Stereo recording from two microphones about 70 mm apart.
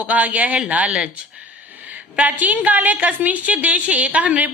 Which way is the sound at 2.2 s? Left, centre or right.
Right.